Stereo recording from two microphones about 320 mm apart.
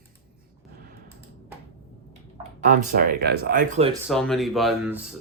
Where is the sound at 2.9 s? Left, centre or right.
Right.